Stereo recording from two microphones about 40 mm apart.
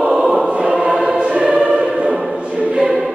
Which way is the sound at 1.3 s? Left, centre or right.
Right.